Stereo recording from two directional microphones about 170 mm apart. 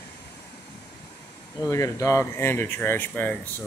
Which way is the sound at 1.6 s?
20° left (ahead or behind).